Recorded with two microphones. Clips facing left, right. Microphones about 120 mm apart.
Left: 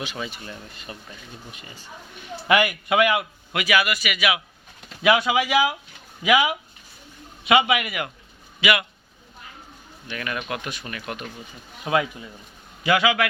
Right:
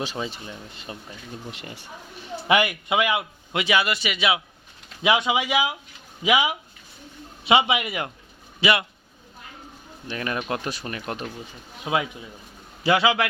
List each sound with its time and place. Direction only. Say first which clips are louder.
0.0 s speech: right 2 dB; 30° right (ahead or behind)
1.5 s speech: right 5 dB; 75° right (ahead or behind)
2.1 s a man's voice: left 1 dB; 30° right (ahead or behind)
10.1 s speech: right 2 dB; 30° right (ahead or behind)
11.9 s speech: left 2 dB; 15° right (ahead or behind)
12.8 s a man's voice: even; 30° right (ahead or behind)